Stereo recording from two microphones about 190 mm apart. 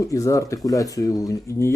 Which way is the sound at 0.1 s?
15° left (ahead or behind).